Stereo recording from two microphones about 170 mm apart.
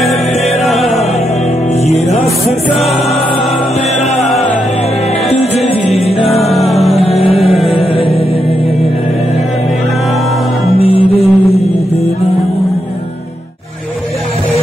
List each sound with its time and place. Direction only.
0.7 s music: centre (ahead or behind)
5.3 s music: 40° left (ahead or behind)
6.5 s music: centre (ahead or behind)
6.9 s music: 35° left (ahead or behind)
10.8 s music: 35° left (ahead or behind)